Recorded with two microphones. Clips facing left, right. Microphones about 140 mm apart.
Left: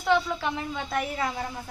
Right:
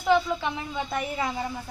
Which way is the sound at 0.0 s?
Centre (ahead or behind).